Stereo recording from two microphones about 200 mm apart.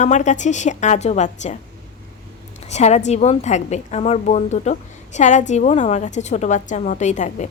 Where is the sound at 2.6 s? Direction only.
35° left (ahead or behind).